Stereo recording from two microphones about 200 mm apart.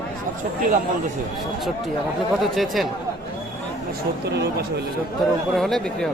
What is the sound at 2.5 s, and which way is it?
Speech, centre (ahead or behind).